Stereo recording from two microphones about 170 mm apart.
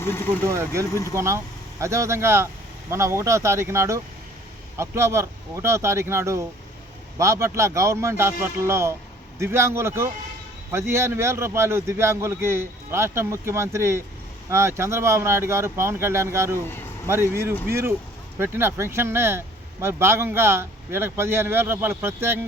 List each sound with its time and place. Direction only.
0.0 s speech: 15° left (ahead or behind)
0.4 s speech: 15° right (ahead or behind)
16.6 s speech: 15° left (ahead or behind)
17.1 s speech: 15° right (ahead or behind)